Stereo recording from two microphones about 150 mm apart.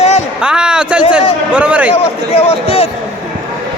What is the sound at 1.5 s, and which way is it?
Speech, 10° right (ahead or behind).